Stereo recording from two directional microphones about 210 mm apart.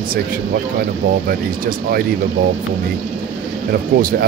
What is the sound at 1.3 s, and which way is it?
Speech, 45° right (ahead or behind).